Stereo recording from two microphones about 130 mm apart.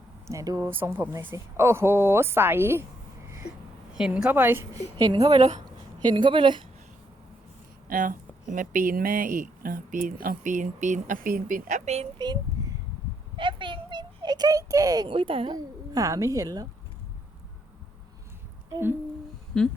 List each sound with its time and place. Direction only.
0.3 s speech: 25° right (ahead or behind)
3.9 s a woman's voice: 5° right (ahead or behind)
4.9 s speech: 30° right (ahead or behind)
5.3 s speech: 60° right (ahead or behind)
6.1 s speech: 40° right (ahead or behind)
7.9 s speech: 90° right; by 12.0 s 65° right (ahead or behind)
12.2 s a sound: 35° right (ahead or behind)
15.1 s speech: 45° right (ahead or behind)
15.5 s speech: 30° right (ahead or behind)
18.7 s a woman's voice: 15° right (ahead or behind)
19.5 s a sound: 5° left (ahead or behind)